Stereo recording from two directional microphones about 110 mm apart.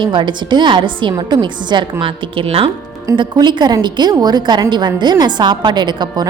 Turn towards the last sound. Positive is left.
turn(degrees=-40)  # may be behind; listen again after turning